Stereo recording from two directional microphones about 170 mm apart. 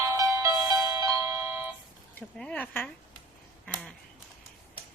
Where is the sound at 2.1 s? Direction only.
5° left (ahead or behind).